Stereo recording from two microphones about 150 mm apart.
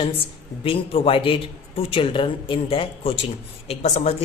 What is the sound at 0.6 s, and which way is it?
A woman's voice, 40° left (ahead or behind).